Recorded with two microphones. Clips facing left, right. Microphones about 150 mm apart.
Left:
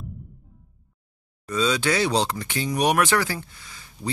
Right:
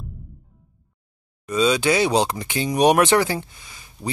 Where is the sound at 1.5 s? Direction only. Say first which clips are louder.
Right 4 dB; 15° right (ahead or behind).